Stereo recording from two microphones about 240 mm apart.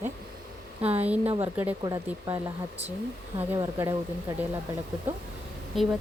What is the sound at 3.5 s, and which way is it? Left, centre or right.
Speech, centre.